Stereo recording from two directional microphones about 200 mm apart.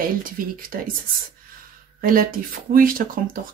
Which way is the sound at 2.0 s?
45° right (ahead or behind).